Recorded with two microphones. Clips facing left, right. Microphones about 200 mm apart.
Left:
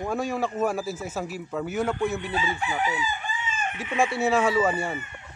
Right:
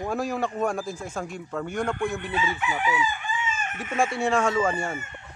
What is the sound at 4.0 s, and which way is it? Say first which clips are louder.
Speech: left 1 dB; 5° left (ahead or behind).